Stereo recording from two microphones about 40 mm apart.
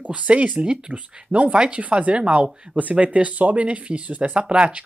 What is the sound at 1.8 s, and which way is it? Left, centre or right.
Speech, right.